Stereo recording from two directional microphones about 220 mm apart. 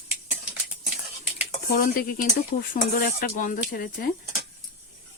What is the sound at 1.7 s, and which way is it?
Speech, 40° left (ahead or behind).